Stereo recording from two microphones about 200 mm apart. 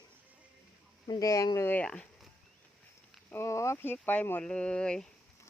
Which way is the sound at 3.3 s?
15° left (ahead or behind).